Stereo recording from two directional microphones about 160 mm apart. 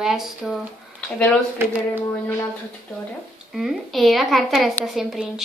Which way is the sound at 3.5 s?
Centre (ahead or behind).